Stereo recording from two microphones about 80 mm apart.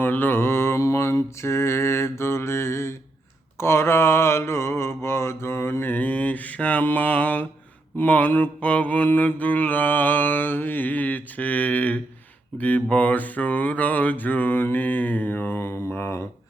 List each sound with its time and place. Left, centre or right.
0.0 s mantra: left